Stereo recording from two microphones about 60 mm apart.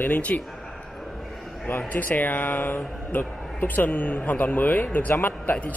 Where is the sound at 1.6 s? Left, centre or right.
Left.